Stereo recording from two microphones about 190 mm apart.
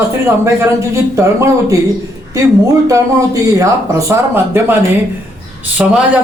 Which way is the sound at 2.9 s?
15° right (ahead or behind).